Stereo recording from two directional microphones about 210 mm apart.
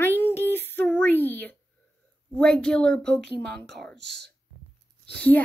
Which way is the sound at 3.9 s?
55° right (ahead or behind).